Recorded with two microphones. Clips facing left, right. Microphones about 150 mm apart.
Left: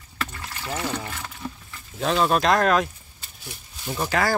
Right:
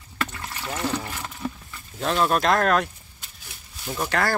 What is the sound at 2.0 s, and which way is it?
Speech, centre (ahead or behind).